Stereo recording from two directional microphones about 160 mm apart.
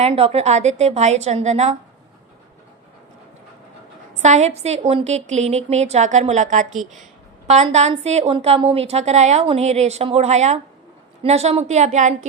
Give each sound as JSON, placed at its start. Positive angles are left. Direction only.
{"t": 0.0, "sound": "a woman's voice", "side_deg": -40}
{"t": 4.1, "sound": "a woman's voice", "side_deg": -45}